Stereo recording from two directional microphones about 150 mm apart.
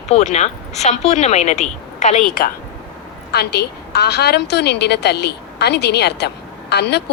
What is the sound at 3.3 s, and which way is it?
A woman's voice, 90° left.